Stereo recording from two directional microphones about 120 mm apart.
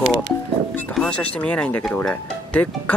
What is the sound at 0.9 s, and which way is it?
Speech, 10° left (ahead or behind).